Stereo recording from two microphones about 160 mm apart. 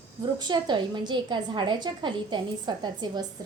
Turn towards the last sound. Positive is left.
turn(degrees=-25)  # may be behind; listen again after turning